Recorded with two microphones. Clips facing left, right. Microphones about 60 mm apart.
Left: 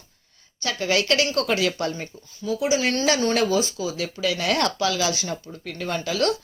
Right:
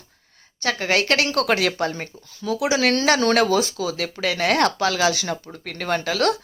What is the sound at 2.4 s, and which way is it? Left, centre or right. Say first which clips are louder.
Speech: right 2 dB; right.